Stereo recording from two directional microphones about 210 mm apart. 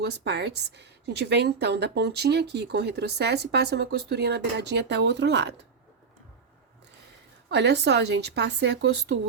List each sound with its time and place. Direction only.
0.0 s a woman's voice: 50° right (ahead or behind)
7.5 s speech: 55° right (ahead or behind)